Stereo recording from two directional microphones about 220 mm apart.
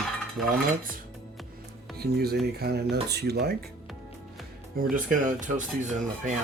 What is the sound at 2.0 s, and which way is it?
Speech, 45° right (ahead or behind).